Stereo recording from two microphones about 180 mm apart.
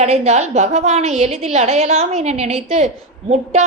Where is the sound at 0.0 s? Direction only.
40° right (ahead or behind).